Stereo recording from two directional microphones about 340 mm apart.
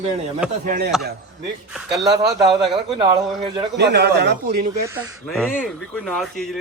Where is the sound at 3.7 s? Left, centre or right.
Right.